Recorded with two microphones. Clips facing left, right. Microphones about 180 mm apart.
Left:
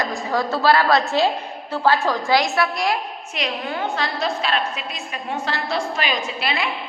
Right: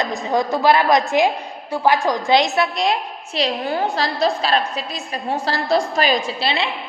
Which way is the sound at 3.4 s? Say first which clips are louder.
Right 5 dB; 35° right (ahead or behind).